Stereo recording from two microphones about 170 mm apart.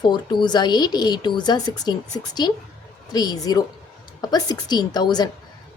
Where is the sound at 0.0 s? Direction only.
25° left (ahead or behind).